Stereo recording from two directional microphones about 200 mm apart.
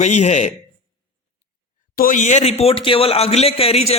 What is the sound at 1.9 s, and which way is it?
Speech, 40° left (ahead or behind).